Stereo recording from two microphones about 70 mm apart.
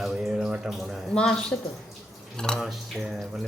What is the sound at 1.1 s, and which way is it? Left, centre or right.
Speech, centre.